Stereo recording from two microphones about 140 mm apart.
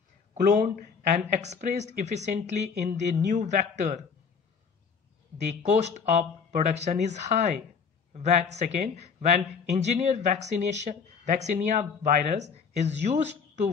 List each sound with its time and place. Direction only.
0.3 s speech: 60° right (ahead or behind)
5.5 s speech: 55° right (ahead or behind)